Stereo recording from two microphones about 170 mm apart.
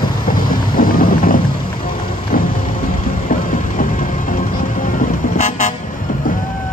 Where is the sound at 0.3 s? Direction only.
55° left (ahead or behind).